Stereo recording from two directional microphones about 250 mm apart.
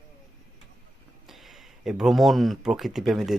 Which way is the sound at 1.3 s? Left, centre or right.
Centre.